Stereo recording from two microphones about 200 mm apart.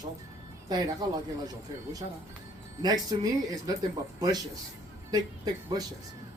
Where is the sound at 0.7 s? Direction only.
20° right (ahead or behind).